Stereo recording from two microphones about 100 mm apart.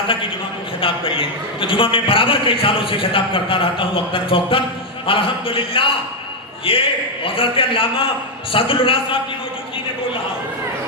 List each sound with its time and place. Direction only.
0.8 s a man's voice: 60° left (ahead or behind)